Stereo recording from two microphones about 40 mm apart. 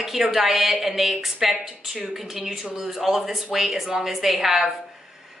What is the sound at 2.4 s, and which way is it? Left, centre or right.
A woman's voice, centre.